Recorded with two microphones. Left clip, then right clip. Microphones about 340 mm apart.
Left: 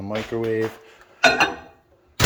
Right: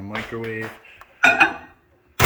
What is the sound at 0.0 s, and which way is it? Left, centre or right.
Speech, centre.